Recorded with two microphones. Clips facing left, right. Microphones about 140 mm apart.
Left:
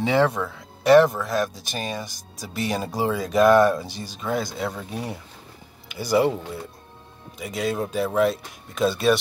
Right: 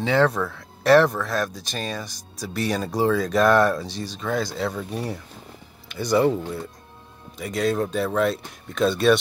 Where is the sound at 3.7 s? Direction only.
20° left (ahead or behind).